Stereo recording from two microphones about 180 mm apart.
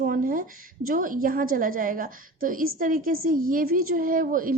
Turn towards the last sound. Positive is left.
turn(degrees=-50)  # may be behind; listen again after turning